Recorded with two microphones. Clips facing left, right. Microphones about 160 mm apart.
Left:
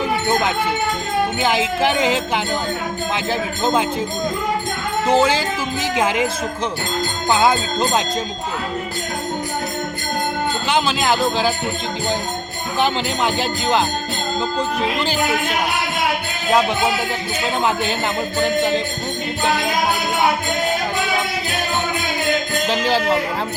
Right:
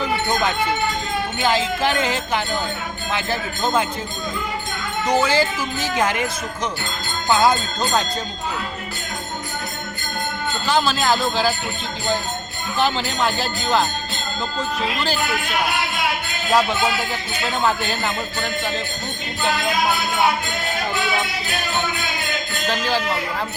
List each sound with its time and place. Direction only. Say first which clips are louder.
1.4 s speech: right 2 dB; 20° left (ahead or behind)
5.0 s speech: left 4 dB; 30° left (ahead or behind)
7.3 s speech: even; 20° left (ahead or behind)
10.7 s speech: right 1 dB; 20° left (ahead or behind)
12.8 s speech: left 1 dB; 20° left (ahead or behind)
17.6 s speech: even; 20° left (ahead or behind)
22.7 s speech: left 3 dB; 25° left (ahead or behind)